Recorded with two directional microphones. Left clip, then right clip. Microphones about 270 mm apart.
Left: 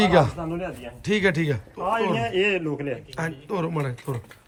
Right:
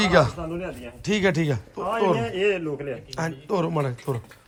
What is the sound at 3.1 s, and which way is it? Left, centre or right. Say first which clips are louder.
Speech: right 2 dB; centre.